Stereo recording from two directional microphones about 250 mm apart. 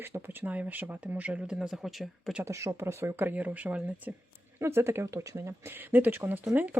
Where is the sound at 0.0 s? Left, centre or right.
Centre.